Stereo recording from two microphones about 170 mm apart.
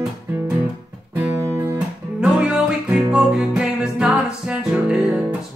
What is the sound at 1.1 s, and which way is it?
Music, 15° right (ahead or behind).